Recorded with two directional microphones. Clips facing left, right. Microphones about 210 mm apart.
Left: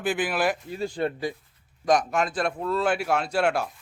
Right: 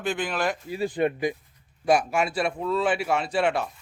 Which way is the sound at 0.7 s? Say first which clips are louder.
Right 3 dB; 15° right (ahead or behind).